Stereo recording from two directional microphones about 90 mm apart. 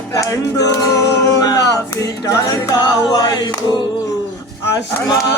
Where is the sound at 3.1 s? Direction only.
50° left (ahead or behind).